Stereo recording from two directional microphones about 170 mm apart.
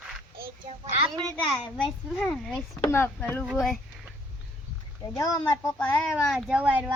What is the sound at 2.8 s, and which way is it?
Speech, 15° left (ahead or behind).